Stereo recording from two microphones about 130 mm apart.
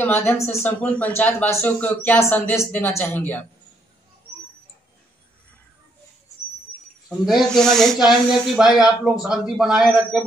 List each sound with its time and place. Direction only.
0.0 s speech: 15° left (ahead or behind)
7.2 s speech: centre (ahead or behind)